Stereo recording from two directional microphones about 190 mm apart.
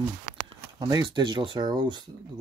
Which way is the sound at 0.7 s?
20° right (ahead or behind).